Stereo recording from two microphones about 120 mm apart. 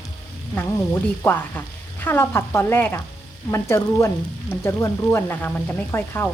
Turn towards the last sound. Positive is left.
turn(degrees=15)  # may be behind; listen again after turning